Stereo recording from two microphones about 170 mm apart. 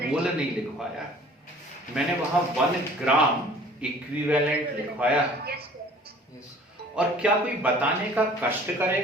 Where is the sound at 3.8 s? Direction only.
5° right (ahead or behind).